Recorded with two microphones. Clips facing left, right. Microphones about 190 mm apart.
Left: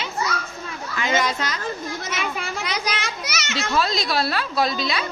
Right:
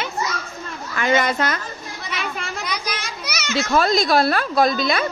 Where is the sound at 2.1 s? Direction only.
Centre (ahead or behind).